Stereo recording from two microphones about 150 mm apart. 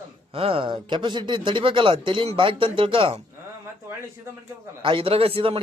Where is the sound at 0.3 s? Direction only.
40° right (ahead or behind).